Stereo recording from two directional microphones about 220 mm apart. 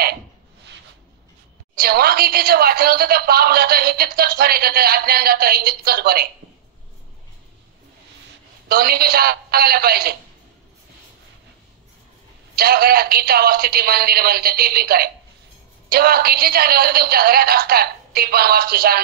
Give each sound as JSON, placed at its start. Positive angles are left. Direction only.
{"t": 1.8, "sound": "a woman's voice", "side_deg": -45}
{"t": 8.6, "sound": "a woman's voice", "side_deg": -45}
{"t": 12.5, "sound": "a woman's voice", "side_deg": -45}